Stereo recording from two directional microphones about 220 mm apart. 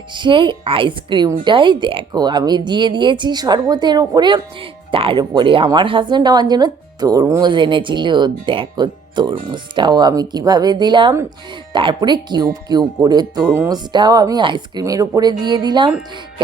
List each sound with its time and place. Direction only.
0.1 s a woman's voice: 20° right (ahead or behind)